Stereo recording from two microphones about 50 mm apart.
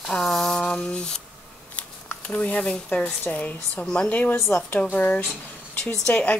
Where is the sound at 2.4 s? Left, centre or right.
Left.